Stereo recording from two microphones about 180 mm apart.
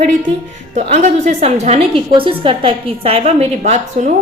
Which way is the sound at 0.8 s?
40° right (ahead or behind).